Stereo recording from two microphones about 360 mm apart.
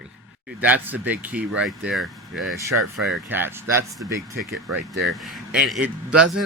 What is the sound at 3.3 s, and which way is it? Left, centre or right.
Speech, centre.